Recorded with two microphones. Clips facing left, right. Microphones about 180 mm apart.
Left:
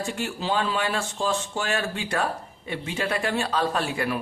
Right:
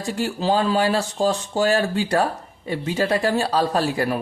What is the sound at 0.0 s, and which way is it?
Speech, 40° right (ahead or behind).